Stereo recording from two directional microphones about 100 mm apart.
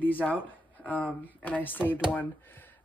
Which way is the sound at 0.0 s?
15° left (ahead or behind).